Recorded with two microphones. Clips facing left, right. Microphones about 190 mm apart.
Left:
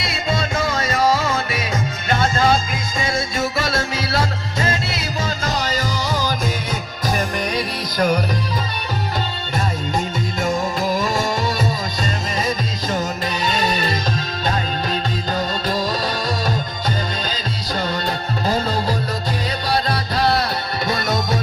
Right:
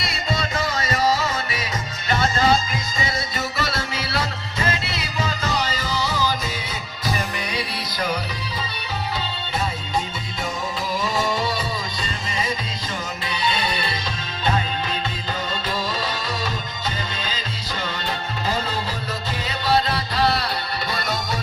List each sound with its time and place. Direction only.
0.1 s music: 50° left (ahead or behind)
10.4 s music: 45° left (ahead or behind)
15.7 s music: 45° left (ahead or behind)
18.4 s music: 45° left (ahead or behind)